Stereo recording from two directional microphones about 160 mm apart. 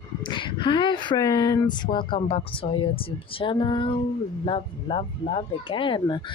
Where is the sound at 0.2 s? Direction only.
30° left (ahead or behind).